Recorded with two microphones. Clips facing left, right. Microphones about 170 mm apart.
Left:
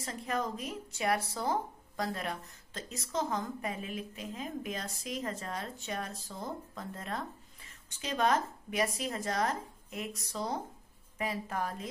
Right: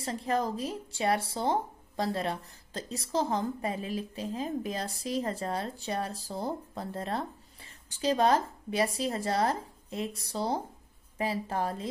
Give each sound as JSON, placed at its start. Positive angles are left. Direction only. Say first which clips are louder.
{"t": 0.0, "sound": "speech", "louder": "right 5 dB", "side_deg": -30}